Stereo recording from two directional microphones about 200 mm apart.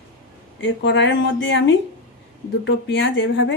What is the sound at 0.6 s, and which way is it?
Speech, 65° left (ahead or behind).